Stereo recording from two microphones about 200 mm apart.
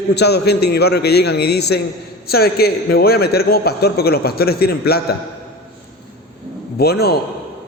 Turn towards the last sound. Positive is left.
turn(degrees=50)  # may be behind; listen again after turning